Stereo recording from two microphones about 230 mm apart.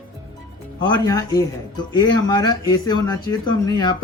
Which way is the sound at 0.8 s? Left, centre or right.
Centre.